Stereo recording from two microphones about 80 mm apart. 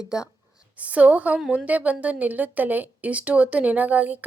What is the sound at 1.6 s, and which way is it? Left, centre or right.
A woman's voice, centre.